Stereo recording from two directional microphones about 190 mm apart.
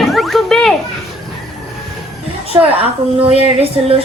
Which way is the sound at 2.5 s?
20° right (ahead or behind).